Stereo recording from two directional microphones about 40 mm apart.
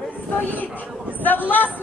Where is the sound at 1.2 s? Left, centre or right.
Left.